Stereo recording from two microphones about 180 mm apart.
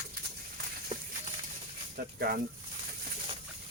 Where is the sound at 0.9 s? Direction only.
30° right (ahead or behind).